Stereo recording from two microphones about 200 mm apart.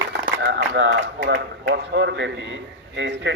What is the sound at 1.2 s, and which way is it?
A man's voice, 60° right (ahead or behind).